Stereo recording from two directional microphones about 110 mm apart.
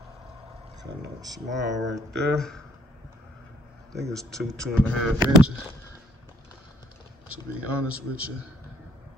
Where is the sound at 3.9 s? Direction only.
5° left (ahead or behind).